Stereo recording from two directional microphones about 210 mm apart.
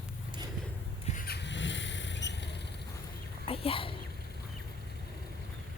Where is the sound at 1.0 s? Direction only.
40° left (ahead or behind).